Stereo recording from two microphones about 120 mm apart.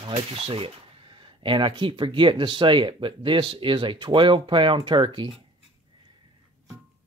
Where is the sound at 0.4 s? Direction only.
50° right (ahead or behind).